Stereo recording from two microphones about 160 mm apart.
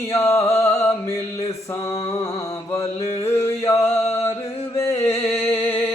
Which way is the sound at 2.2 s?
35° left (ahead or behind).